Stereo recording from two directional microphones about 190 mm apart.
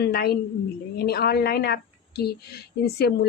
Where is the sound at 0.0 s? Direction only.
55° left (ahead or behind).